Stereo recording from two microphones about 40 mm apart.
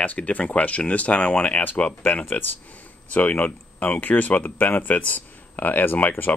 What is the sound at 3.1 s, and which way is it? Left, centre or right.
Speech, left.